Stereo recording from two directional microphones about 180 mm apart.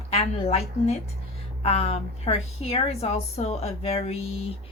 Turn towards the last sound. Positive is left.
turn(degrees=35)  # may be behind; listen again after turning